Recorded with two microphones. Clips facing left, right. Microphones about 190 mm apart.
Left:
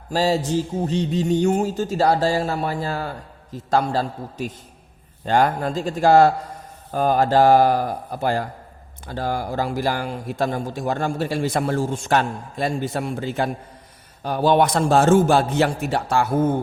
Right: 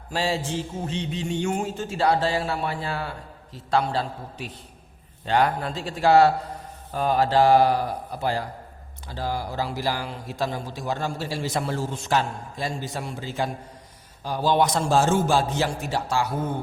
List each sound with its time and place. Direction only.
0.1 s mantra: 40° left (ahead or behind)
3.5 s a man's voice: 45° left (ahead or behind)